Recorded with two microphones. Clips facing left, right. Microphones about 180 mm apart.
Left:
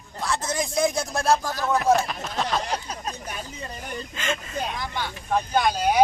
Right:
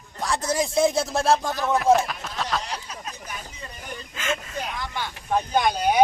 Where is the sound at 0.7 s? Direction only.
25° right (ahead or behind).